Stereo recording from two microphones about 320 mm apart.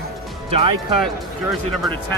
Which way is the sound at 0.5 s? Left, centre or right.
Centre.